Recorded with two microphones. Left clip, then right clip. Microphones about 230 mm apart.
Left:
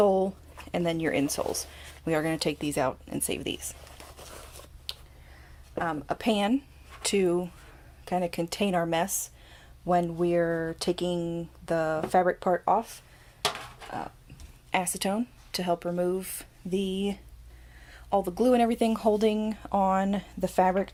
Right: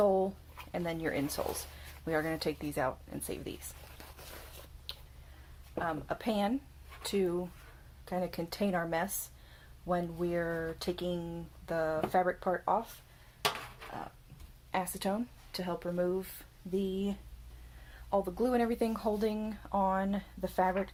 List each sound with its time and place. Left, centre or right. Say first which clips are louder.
0.0 s a sound: left 5 dB; left
0.7 s speech: left 8 dB; left
5.8 s speech: left 6 dB; left
14.7 s speech: left 6 dB; left